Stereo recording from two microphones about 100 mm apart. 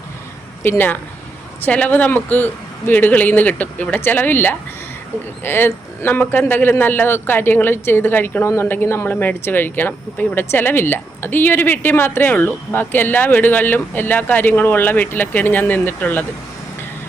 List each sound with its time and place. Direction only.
0.6 s a man's voice: 20° left (ahead or behind)